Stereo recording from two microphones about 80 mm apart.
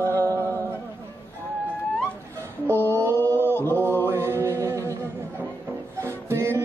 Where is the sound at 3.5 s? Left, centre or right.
Left.